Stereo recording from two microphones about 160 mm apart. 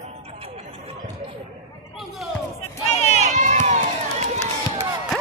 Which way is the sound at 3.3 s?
50° right (ahead or behind).